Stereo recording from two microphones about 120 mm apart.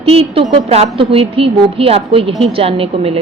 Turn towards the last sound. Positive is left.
turn(degrees=-55)  # may be behind; listen again after turning